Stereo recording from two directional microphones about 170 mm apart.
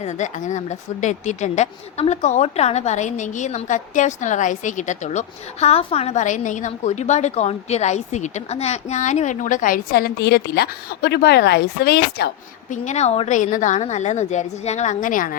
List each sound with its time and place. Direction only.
0.0 s speech: 45° left (ahead or behind); by 12.3 s 70° left (ahead or behind)
12.7 s speech: 45° left (ahead or behind)